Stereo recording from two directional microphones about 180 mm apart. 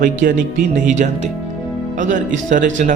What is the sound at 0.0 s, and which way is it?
Speech, 50° right (ahead or behind).